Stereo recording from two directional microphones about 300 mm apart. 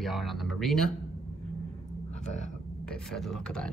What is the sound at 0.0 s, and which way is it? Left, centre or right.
Speech, centre.